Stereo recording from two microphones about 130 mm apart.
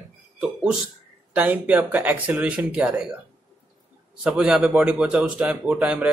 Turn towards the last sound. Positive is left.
turn(degrees=-10)  # may be behind; listen again after turning